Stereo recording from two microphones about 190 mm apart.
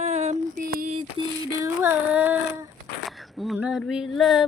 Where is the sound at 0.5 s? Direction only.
50° right (ahead or behind).